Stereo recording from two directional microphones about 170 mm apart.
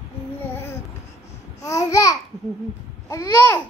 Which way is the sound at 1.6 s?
20° left (ahead or behind).